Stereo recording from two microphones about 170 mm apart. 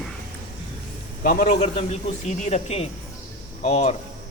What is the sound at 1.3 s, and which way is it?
Speech, 50° left (ahead or behind).